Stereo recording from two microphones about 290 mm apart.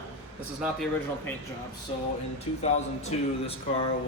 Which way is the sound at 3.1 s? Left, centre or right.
Left.